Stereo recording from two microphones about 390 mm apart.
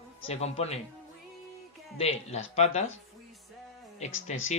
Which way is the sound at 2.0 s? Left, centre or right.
Centre.